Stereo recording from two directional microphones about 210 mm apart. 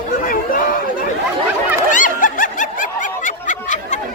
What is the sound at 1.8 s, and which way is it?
Snicker, 40° left (ahead or behind).